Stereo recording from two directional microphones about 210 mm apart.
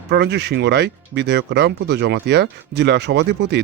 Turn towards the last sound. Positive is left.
turn(degrees=-55)  # may be behind; listen again after turning